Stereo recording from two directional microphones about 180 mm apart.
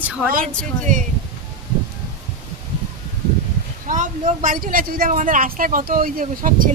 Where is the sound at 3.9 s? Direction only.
45° right (ahead or behind).